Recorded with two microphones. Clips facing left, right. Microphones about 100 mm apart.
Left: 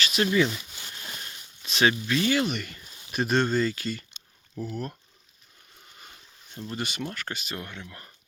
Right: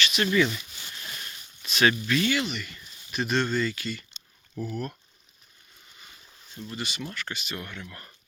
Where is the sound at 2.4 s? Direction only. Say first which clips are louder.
Left 4 dB; 50° left (ahead or behind).